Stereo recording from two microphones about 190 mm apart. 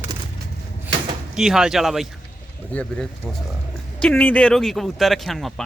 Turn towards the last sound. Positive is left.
turn(degrees=0)  # may be behind; listen again after turning